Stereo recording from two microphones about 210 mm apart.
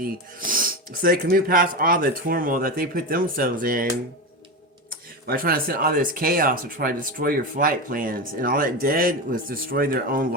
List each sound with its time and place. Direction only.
0.0 s speech: 40° right (ahead or behind)